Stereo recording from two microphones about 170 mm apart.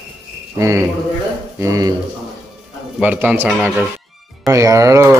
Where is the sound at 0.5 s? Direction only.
15° right (ahead or behind).